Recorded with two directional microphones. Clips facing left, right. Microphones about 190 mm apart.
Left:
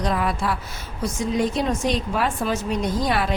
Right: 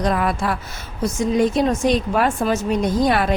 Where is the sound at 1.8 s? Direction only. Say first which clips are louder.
Right 5 dB; 45° right (ahead or behind).